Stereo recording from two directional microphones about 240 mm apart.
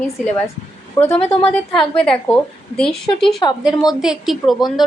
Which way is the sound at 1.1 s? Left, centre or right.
Left.